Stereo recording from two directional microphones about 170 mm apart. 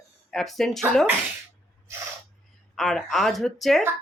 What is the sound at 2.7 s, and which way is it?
Speech, centre (ahead or behind).